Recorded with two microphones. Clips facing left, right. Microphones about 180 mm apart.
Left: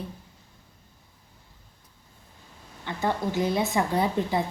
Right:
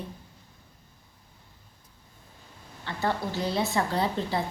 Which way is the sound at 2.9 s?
15° left (ahead or behind).